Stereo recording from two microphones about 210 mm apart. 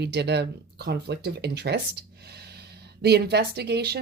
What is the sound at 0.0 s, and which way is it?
Speech, 55° right (ahead or behind).